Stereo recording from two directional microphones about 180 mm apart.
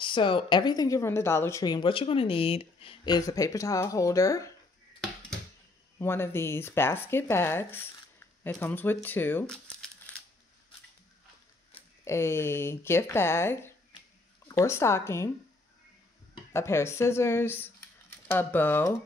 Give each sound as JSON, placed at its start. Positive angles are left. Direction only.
{"t": 0.0, "sound": "a woman's voice", "side_deg": 25}
{"t": 5.9, "sound": "speech", "side_deg": 15}
{"t": 12.0, "sound": "speech", "side_deg": 15}
{"t": 16.5, "sound": "speech", "side_deg": 15}